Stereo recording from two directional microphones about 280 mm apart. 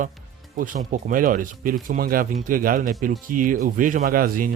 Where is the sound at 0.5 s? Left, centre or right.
Right.